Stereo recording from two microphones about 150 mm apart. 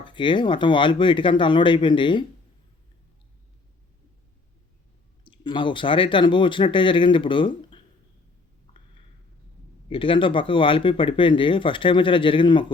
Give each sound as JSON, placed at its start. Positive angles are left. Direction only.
{"t": 0.0, "sound": "speech", "side_deg": 35}
{"t": 5.2, "sound": "speech", "side_deg": 30}
{"t": 9.9, "sound": "speech", "side_deg": 35}